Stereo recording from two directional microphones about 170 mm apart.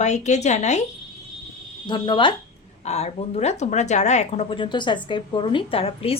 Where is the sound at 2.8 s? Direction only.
40° left (ahead or behind).